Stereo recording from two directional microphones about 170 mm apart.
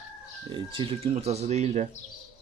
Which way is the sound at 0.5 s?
30° right (ahead or behind).